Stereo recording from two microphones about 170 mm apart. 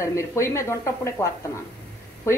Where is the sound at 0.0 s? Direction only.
15° left (ahead or behind).